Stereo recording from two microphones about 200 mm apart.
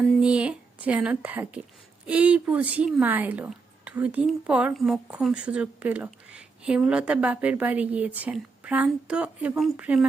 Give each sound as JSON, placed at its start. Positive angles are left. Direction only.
{"t": 0.2, "sound": "speech", "side_deg": -5}